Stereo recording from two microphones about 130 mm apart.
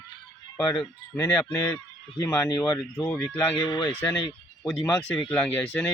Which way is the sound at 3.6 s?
35° left (ahead or behind).